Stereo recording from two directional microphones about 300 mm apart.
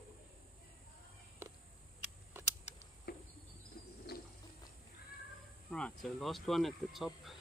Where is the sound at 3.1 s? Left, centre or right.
Left.